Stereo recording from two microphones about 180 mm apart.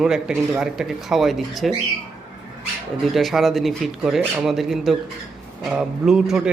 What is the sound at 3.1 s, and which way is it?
Speech, centre (ahead or behind).